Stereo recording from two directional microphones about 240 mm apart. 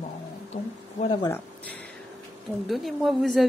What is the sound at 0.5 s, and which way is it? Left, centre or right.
Speech, left.